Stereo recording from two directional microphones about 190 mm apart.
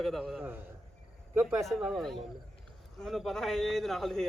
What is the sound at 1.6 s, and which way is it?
A man's voice, centre (ahead or behind).